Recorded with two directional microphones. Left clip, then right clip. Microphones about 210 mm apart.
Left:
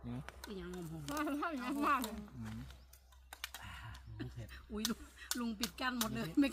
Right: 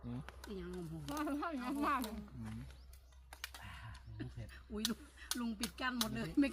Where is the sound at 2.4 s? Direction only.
25° left (ahead or behind).